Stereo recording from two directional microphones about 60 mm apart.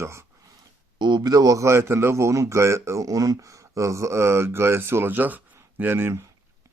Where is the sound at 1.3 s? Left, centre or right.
Right.